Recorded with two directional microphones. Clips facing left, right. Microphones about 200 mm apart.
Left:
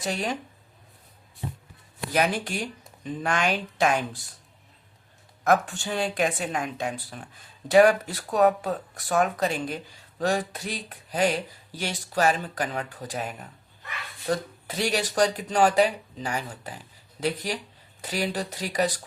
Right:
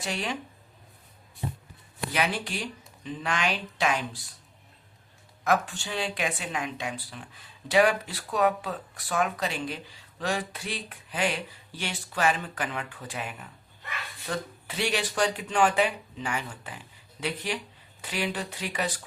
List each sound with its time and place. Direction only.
0.0 s speech: 40° left (ahead or behind)
2.1 s speech: 45° left (ahead or behind)
5.4 s speech: 45° left (ahead or behind)